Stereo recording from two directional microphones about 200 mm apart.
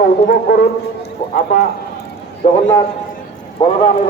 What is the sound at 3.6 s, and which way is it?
Speech, 25° left (ahead or behind).